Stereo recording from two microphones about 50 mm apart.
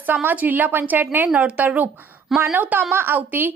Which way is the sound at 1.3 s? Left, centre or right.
Right.